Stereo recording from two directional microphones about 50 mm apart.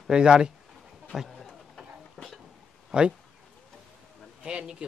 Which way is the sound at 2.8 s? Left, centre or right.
Centre.